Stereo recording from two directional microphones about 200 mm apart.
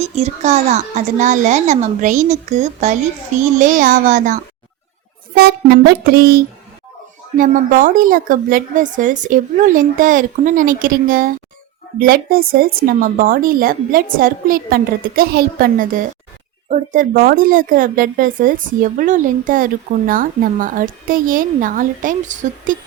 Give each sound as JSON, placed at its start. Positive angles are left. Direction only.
{"t": 0.0, "sound": "speech", "side_deg": -35}
{"t": 5.4, "sound": "a woman's voice", "side_deg": -55}